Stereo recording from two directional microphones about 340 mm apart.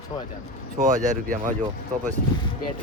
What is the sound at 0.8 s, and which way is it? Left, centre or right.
Speech, right.